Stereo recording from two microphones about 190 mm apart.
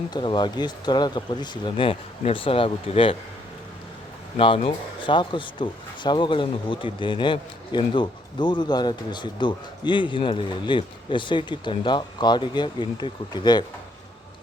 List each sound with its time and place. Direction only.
0.1 s speech: 25° left (ahead or behind)
4.4 s speech: 30° left (ahead or behind)